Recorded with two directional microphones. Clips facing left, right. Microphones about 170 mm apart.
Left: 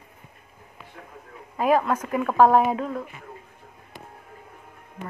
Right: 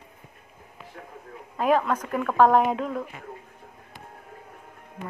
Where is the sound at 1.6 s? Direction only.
5° left (ahead or behind).